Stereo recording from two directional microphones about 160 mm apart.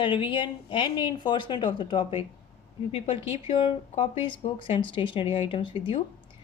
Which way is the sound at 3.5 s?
30° left (ahead or behind).